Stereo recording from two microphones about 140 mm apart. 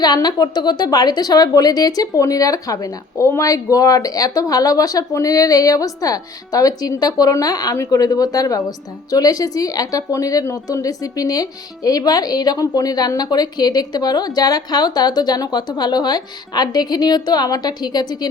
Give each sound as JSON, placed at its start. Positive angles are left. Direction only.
{"t": 0.0, "sound": "speech", "side_deg": 30}